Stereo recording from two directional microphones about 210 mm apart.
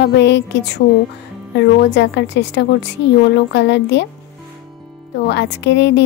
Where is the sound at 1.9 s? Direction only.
55° left (ahead or behind).